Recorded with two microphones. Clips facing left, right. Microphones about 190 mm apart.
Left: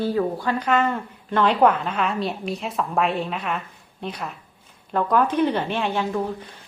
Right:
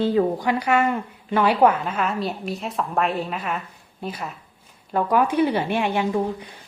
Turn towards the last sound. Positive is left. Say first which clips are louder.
# right 2 dB
turn(degrees=-15)  # may be behind; listen again after turning